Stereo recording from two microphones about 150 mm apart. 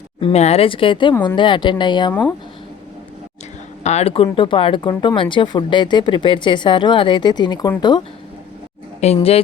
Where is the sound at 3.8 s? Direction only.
45° left (ahead or behind); by 8.0 s 30° left (ahead or behind).